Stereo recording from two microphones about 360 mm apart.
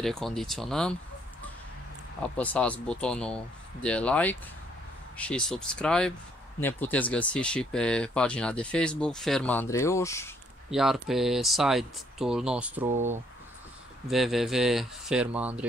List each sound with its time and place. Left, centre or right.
0.0 s speech: centre
2.3 s speech: centre
12.9 s speech: centre
14.1 s speech: centre